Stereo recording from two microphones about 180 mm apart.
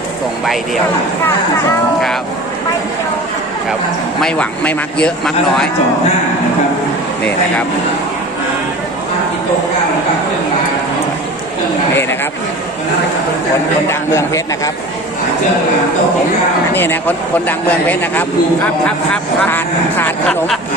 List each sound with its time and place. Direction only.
0.4 s a man's voice: centre (ahead or behind)
4.2 s a man's voice: 5° left (ahead or behind)
14.1 s speech: 15° left (ahead or behind)
16.7 s speech: 10° left (ahead or behind)